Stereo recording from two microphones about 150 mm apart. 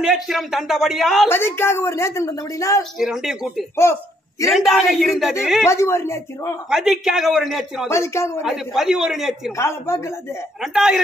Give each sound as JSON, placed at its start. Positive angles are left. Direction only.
{"t": 0.0, "sound": "a man's voice", "side_deg": 0}
{"t": 1.3, "sound": "a woman's voice", "side_deg": 15}
{"t": 3.0, "sound": "a man's voice", "side_deg": -5}
{"t": 3.7, "sound": "speech", "side_deg": 15}
{"t": 4.5, "sound": "a man's voice", "side_deg": 0}
{"t": 5.7, "sound": "speech", "side_deg": 20}
{"t": 6.7, "sound": "a man's voice", "side_deg": -5}
{"t": 7.9, "sound": "speech", "side_deg": 20}
{"t": 8.5, "sound": "a man's voice", "side_deg": -5}
{"t": 9.6, "sound": "speech", "side_deg": 20}
{"t": 10.6, "sound": "a man's voice", "side_deg": -5}